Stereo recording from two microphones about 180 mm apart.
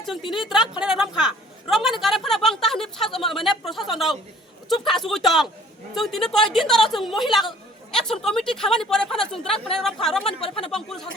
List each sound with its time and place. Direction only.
0.2 s speech: 25° left (ahead or behind)
0.4 s a woman's voice: 5° right (ahead or behind)
10.4 s speech: 30° left (ahead or behind)
10.7 s a woman's voice: centre (ahead or behind)